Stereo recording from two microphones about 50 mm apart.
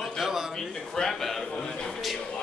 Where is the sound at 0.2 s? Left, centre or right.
Centre.